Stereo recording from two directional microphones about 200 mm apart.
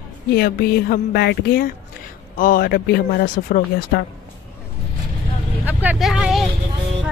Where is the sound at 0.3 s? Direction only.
55° left (ahead or behind).